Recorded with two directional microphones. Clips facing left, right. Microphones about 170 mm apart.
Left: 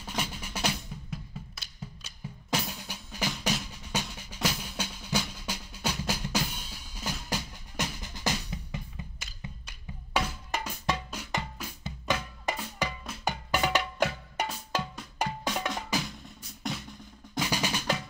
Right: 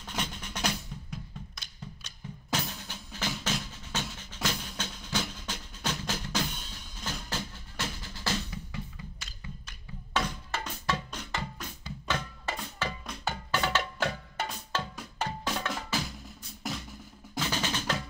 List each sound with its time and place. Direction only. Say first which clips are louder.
0.0 s drum: left 1 dB; 10° left (ahead or behind)
3.7 s percussion: left 2 dB; 10° left (ahead or behind)
11.8 s drum: left 2 dB; 15° left (ahead or behind)
13.2 s music: left 2 dB; 15° left (ahead or behind)
15.2 s drum: left 2 dB; 15° left (ahead or behind)
15.9 s music: left 2 dB; 15° left (ahead or behind)
16.6 s music: left 1 dB; 5° right (ahead or behind)
17.4 s percussion: left 2 dB; 10° left (ahead or behind)